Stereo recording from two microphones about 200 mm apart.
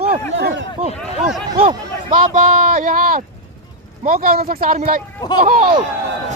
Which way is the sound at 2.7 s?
40° right (ahead or behind).